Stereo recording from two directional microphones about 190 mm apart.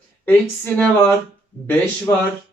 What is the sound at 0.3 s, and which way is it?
Speech, 10° left (ahead or behind).